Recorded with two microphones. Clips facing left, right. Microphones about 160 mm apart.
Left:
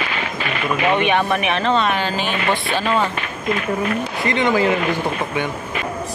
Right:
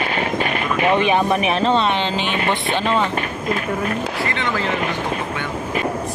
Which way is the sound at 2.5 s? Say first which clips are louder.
Even; 20° right (ahead or behind).